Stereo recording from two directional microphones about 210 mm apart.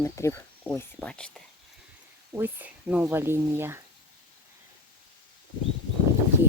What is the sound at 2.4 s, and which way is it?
Speech, 10° right (ahead or behind).